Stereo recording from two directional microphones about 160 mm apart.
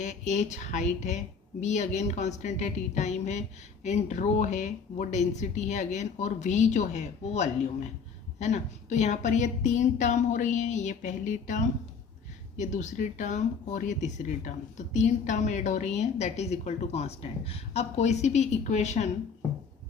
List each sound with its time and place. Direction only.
0.0 s speech: 50° left (ahead or behind)